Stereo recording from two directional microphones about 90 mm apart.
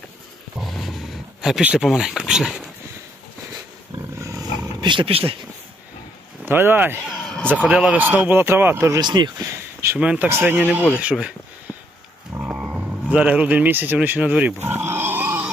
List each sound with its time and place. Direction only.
0.6 s a sound: centre (ahead or behind)
1.6 s speech: 5° right (ahead or behind)
3.9 s roaring cats: 35° right (ahead or behind)
4.8 s speech: 65° right (ahead or behind); by 5.4 s 90° right
6.4 s speech: 25° right (ahead or behind)
7.1 s a sound: 5° left (ahead or behind)
7.7 s speech: 10° right (ahead or behind)
7.9 s speech: 20° right (ahead or behind)
8.9 s speech: 50° right (ahead or behind)
9.4 s speech: 30° right (ahead or behind)
10.0 s speech: 10° right (ahead or behind)
10.2 s speech: 25° right (ahead or behind)
12.5 s a sound: 15° right (ahead or behind)